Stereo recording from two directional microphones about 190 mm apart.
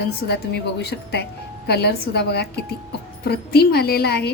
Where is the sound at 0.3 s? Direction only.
60° left (ahead or behind).